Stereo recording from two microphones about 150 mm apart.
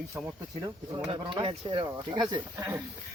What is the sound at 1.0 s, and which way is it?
Speech, 35° right (ahead or behind).